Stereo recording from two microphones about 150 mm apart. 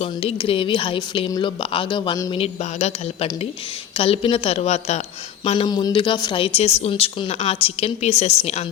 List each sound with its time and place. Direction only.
0.0 s a woman's voice: 40° left (ahead or behind); by 2.3 s 25° left (ahead or behind)
2.3 s a woman's voice: 45° left (ahead or behind)